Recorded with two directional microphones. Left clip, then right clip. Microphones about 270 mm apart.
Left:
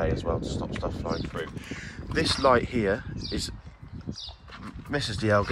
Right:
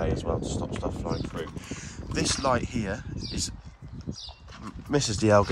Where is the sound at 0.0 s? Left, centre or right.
Centre.